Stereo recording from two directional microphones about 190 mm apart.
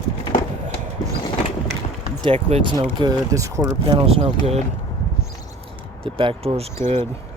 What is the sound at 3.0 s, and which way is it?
Speech, 15° right (ahead or behind).